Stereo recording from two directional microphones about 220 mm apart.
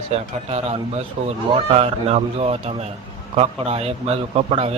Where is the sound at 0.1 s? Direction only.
30° right (ahead or behind).